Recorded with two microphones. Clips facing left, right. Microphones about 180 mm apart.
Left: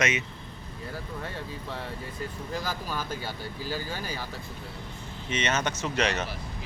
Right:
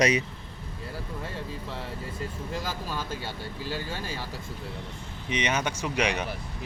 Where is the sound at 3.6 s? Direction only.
Centre (ahead or behind).